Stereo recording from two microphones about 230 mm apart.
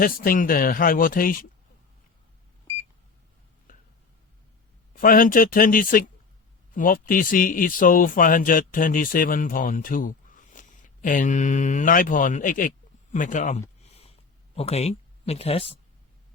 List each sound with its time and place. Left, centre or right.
0.0 s speech: left
4.9 s speech: left
13.1 s a sound: left
14.5 s speech: left